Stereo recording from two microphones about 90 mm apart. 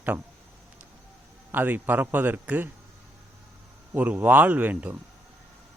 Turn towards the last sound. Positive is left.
turn(degrees=-15)  # may be behind; listen again after turning